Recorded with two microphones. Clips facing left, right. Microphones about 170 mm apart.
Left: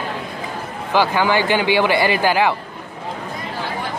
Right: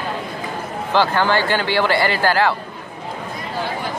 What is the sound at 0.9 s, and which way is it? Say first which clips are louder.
Speech: even; 10° left (ahead or behind).